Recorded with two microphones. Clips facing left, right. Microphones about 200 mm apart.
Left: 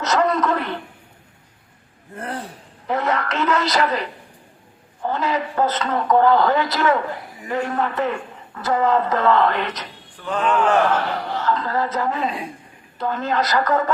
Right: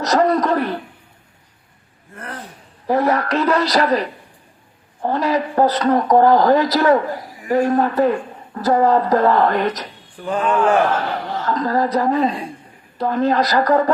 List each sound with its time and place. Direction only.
0.0 s speech: 35° right (ahead or behind)
2.1 s gasp: 30° left (ahead or behind)
2.8 s speech: 35° right (ahead or behind)
10.2 s speech: 10° right (ahead or behind)
11.4 s speech: 40° right (ahead or behind)